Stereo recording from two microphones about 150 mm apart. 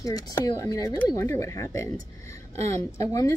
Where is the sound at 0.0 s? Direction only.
25° left (ahead or behind).